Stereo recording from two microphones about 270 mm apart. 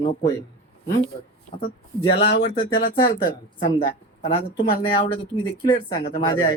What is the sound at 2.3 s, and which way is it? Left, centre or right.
Speech, left.